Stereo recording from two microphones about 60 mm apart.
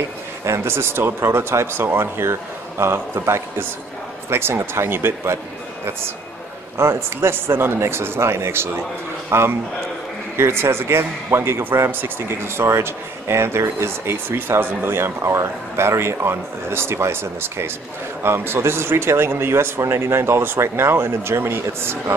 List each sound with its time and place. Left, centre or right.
0.5 s a man's voice: right
6.8 s a man's voice: right